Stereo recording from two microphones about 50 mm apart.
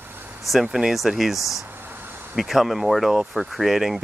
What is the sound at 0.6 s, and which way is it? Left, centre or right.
Speech, centre.